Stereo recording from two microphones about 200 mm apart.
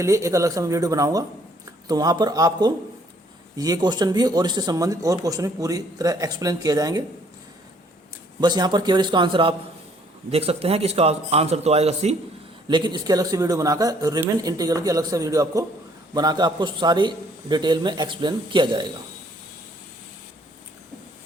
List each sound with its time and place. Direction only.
0.0 s speech: 15° right (ahead or behind)
8.4 s speech: 20° right (ahead or behind)